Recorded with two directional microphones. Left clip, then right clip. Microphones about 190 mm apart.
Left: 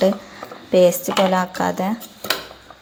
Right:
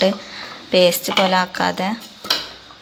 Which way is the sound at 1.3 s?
15° left (ahead or behind).